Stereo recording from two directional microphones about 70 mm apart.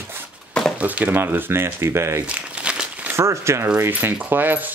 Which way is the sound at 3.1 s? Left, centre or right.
Right.